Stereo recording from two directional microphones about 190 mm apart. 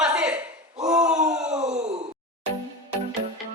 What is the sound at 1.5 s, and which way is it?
Sigh, 35° right (ahead or behind).